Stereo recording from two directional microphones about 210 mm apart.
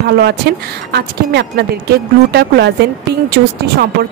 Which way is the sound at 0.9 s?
50° right (ahead or behind).